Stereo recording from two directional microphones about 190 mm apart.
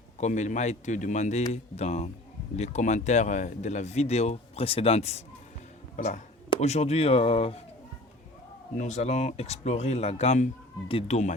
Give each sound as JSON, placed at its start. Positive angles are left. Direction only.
{"t": 0.2, "sound": "speech", "side_deg": 40}
{"t": 6.5, "sound": "speech", "side_deg": 35}
{"t": 8.8, "sound": "speech", "side_deg": 35}